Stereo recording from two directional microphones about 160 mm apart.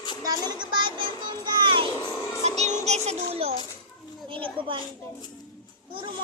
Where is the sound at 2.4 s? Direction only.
45° right (ahead or behind).